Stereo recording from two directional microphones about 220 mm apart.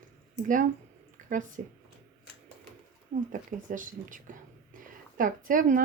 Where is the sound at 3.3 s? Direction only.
35° right (ahead or behind).